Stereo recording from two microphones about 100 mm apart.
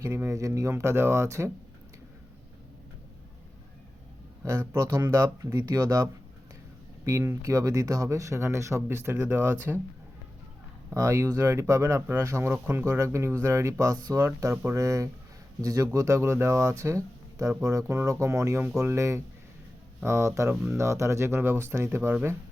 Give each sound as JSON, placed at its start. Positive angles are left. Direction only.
{"t": 0.0, "sound": "speech", "side_deg": -25}
{"t": 4.4, "sound": "speech", "side_deg": -25}
{"t": 10.9, "sound": "speech", "side_deg": -30}